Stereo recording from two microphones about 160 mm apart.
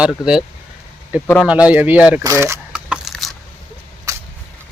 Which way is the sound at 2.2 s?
15° right (ahead or behind).